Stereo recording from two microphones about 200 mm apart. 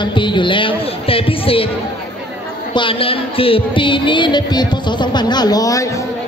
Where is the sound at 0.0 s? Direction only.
25° left (ahead or behind).